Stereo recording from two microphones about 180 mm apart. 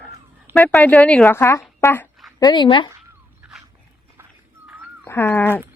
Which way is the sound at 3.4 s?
5° right (ahead or behind).